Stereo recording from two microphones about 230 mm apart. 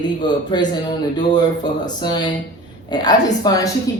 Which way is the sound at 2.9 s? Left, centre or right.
Centre.